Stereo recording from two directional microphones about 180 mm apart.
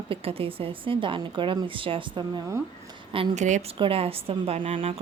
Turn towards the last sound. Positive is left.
turn(degrees=-30)  # may be behind; listen again after turning